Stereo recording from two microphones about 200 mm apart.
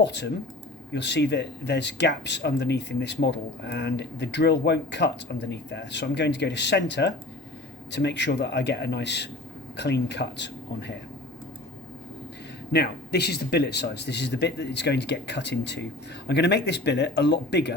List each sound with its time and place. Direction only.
0.0 s speech: 60° left (ahead or behind)
12.7 s speech: 55° left (ahead or behind)